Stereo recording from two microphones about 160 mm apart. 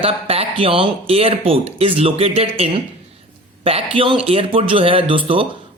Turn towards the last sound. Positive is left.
turn(degrees=-35)  # may be behind; listen again after turning